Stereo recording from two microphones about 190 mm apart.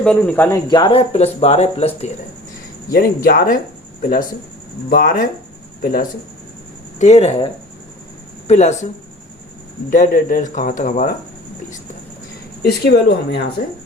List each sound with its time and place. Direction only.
0.0 s speech: 5° left (ahead or behind)
0.7 s speech: 25° left (ahead or behind)
3.2 s speech: 50° left (ahead or behind)
4.9 s speech: 45° left (ahead or behind)
7.0 s speech: 35° left (ahead or behind)
9.9 s speech: 45° left (ahead or behind)
12.6 s speech: 55° left (ahead or behind)